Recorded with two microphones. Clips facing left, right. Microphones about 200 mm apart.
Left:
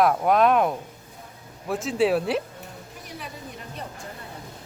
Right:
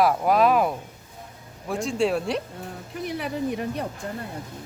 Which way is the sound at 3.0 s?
65° right (ahead or behind).